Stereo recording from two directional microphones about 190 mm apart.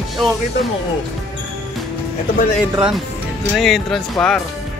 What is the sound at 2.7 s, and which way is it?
Speech, 5° right (ahead or behind).